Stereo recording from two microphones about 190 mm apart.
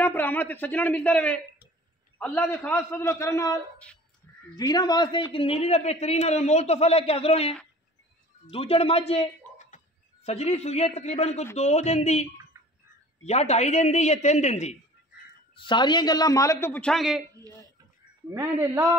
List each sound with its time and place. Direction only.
0.0 s a man's voice: 10° left (ahead or behind); by 9.2 s 30° left (ahead or behind)
9.5 s a sound: 5° left (ahead or behind)
10.2 s a man's voice: 35° left (ahead or behind)
15.5 s a man's voice: 25° left (ahead or behind); by 17.2 s centre (ahead or behind)
18.3 s speech: 15° right (ahead or behind)